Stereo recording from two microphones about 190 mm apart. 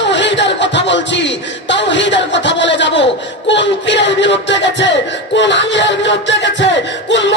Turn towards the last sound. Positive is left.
turn(degrees=70)  # may be behind; listen again after turning